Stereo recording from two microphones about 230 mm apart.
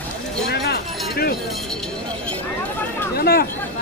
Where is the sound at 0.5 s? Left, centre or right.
Left.